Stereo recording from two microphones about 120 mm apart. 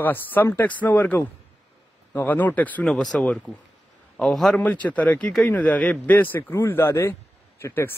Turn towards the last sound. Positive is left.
turn(degrees=20)  # may be behind; listen again after turning